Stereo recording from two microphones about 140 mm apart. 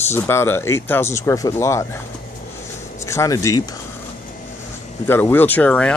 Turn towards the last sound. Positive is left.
turn(degrees=10)  # may be behind; listen again after turning